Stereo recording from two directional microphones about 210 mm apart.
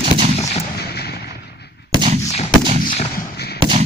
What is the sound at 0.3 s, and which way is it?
Gunshot, 30° left (ahead or behind).